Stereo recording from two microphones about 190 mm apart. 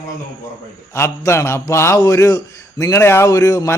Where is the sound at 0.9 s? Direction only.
15° left (ahead or behind).